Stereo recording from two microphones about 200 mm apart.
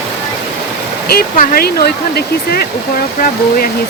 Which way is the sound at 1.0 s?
50° left (ahead or behind).